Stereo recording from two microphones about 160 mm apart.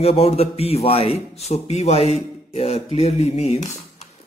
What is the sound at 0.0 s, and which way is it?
A man's voice, 40° left (ahead or behind).